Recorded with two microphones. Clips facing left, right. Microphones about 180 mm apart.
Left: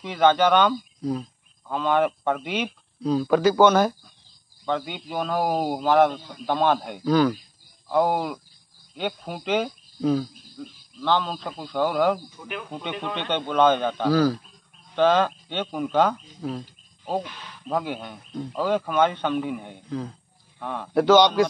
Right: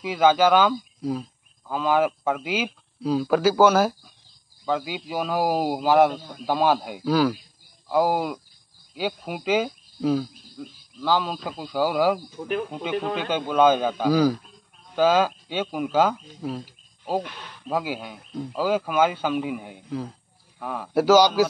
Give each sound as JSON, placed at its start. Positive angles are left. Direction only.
{"t": 0.0, "sound": "speech", "side_deg": -5}
{"t": 12.4, "sound": "speech", "side_deg": -35}
{"t": 13.1, "sound": "speech", "side_deg": -5}